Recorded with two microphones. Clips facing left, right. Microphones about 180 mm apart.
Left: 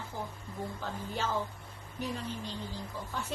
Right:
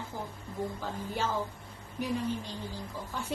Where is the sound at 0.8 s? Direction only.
10° right (ahead or behind).